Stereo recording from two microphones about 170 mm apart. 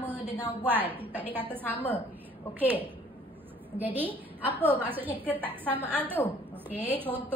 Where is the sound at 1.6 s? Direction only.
10° left (ahead or behind).